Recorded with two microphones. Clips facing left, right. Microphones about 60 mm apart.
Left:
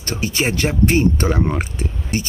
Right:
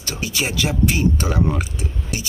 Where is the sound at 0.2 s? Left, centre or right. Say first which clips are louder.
Left 3 dB; left.